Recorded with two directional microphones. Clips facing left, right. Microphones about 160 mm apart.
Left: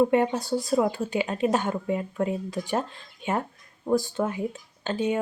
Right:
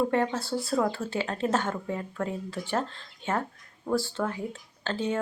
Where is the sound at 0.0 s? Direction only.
15° left (ahead or behind).